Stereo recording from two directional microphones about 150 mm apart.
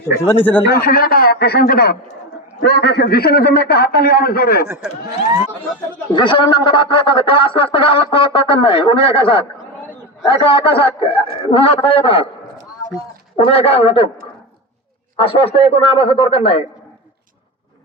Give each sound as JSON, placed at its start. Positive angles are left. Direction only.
{"t": 0.2, "sound": "speech", "side_deg": 15}
{"t": 0.7, "sound": "a man's voice", "side_deg": 90}
{"t": 6.1, "sound": "speech", "side_deg": 35}
{"t": 13.3, "sound": "speech", "side_deg": 40}
{"t": 15.1, "sound": "speech", "side_deg": 35}